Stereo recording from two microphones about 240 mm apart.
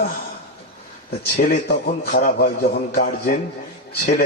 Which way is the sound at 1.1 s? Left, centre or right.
Left.